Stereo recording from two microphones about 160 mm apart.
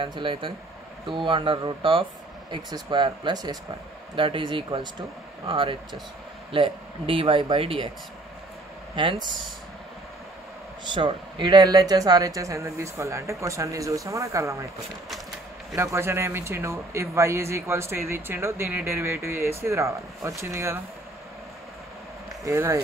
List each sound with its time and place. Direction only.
0.0 s speech: 30° right (ahead or behind)
8.9 s speech: 30° right (ahead or behind)
10.9 s speech: 30° right (ahead or behind)
15.7 s speech: 15° right (ahead or behind)
22.4 s speech: 20° right (ahead or behind)